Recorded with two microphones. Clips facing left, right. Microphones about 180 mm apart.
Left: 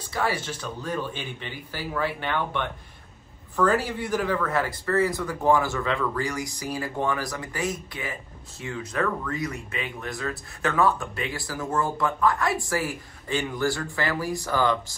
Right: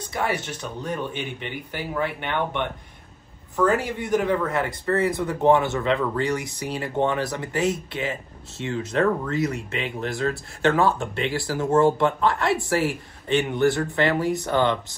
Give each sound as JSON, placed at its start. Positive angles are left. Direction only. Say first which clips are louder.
{"t": 0.1, "sound": "speech", "louder": "right 1 dB", "side_deg": -20}